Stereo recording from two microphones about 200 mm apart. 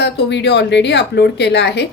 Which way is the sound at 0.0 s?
60° left (ahead or behind).